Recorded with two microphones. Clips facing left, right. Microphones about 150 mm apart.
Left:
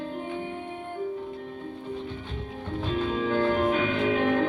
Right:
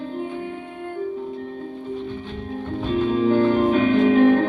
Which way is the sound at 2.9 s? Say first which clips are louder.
Right 8 dB; 45° right (ahead or behind).